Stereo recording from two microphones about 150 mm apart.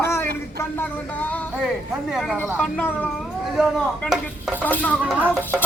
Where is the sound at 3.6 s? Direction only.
5° right (ahead or behind).